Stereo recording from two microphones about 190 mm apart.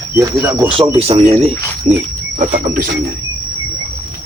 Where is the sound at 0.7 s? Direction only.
30° right (ahead or behind).